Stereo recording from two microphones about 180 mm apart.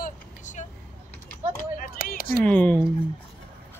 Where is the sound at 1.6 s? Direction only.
50° left (ahead or behind).